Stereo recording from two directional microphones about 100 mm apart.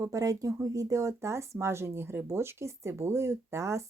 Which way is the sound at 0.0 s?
35° right (ahead or behind).